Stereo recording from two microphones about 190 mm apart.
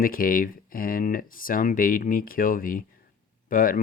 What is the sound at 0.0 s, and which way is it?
Speech, 50° left (ahead or behind).